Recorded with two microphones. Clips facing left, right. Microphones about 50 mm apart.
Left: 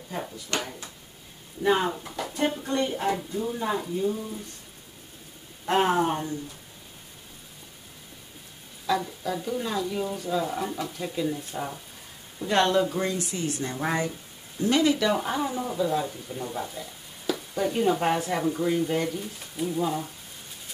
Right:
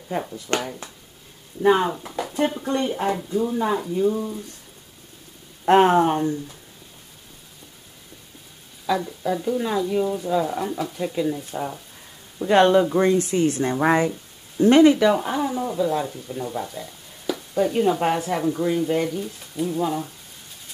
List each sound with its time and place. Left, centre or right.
0.5 s speech: right
1.7 s speech: centre
5.7 s speech: right
8.8 s speech: centre
12.4 s speech: centre; by 15.0 s right
15.1 s speech: centre